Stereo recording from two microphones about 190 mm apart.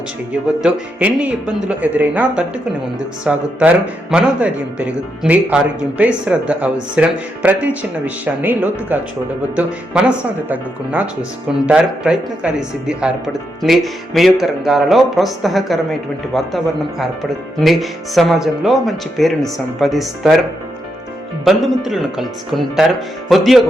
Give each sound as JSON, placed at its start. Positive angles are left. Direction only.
{"t": 0.4, "sound": "a man's voice", "side_deg": -5}
{"t": 17.6, "sound": "speech", "side_deg": 0}
{"t": 21.4, "sound": "speech", "side_deg": 0}